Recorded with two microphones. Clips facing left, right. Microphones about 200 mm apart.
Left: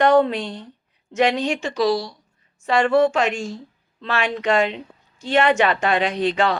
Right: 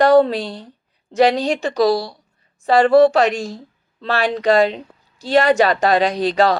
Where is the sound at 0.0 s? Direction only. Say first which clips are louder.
Right 3 dB; 35° right (ahead or behind).